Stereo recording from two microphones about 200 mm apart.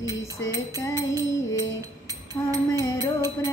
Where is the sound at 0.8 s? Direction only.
15° left (ahead or behind).